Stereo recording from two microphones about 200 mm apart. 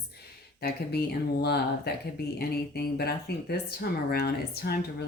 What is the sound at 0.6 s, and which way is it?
Speech, 55° left (ahead or behind).